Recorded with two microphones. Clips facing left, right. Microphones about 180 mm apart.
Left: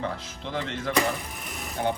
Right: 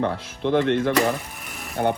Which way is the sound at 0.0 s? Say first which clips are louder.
Right 9 dB; 60° right (ahead or behind).